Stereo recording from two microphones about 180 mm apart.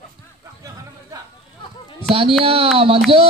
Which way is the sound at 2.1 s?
30° right (ahead or behind).